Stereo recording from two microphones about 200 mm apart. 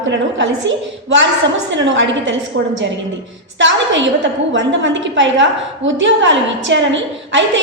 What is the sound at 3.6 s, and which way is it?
A woman's voice, 65° right (ahead or behind).